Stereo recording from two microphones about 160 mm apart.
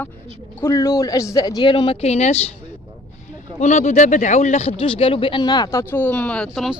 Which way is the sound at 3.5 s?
45° left (ahead or behind).